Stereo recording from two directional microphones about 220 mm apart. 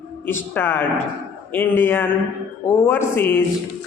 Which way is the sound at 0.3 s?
10° left (ahead or behind).